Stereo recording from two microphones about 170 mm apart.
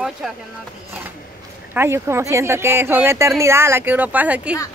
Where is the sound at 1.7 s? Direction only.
15° right (ahead or behind).